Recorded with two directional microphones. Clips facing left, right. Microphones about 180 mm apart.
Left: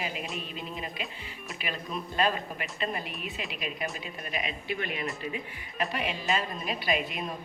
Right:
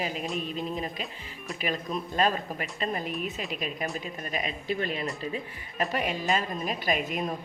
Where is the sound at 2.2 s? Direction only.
40° right (ahead or behind).